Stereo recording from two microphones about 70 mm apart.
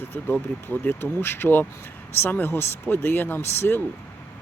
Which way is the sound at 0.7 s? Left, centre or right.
Left.